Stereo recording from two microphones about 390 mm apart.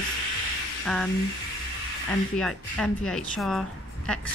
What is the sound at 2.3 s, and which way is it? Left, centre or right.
Speech, centre.